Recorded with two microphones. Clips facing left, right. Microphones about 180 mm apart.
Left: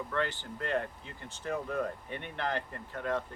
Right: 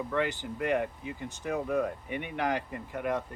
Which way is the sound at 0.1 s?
15° right (ahead or behind).